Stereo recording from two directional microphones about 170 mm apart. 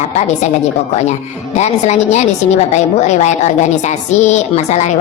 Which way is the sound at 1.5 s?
40° left (ahead or behind).